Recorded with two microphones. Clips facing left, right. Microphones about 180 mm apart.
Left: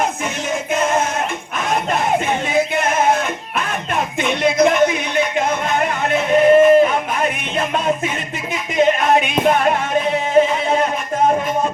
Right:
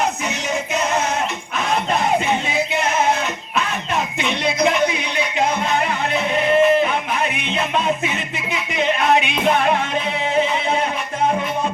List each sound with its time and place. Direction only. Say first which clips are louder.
2.5 s music: left 3 dB; 50° left (ahead or behind)
4.2 s music: left 6 dB; 50° left (ahead or behind)